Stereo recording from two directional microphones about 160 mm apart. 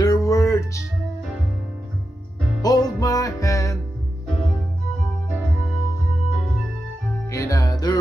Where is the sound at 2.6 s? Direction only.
25° left (ahead or behind).